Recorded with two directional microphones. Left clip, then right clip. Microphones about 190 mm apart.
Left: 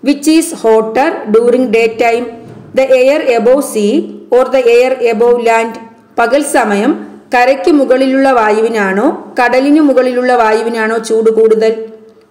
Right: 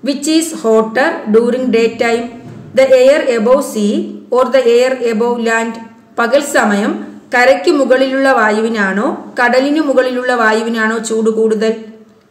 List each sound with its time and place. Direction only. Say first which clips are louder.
0.0 s a woman's voice: left 4 dB; 20° left (ahead or behind)